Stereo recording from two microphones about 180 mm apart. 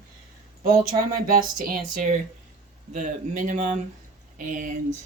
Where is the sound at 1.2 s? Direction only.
50° right (ahead or behind).